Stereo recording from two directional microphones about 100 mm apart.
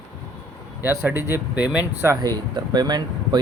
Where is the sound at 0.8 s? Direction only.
25° right (ahead or behind).